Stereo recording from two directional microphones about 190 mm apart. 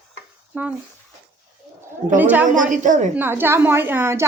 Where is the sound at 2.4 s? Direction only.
40° right (ahead or behind).